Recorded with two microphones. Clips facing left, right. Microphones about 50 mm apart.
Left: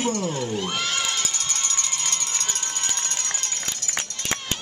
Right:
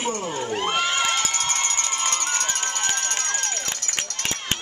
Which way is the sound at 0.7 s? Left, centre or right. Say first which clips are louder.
Right 4 dB; right.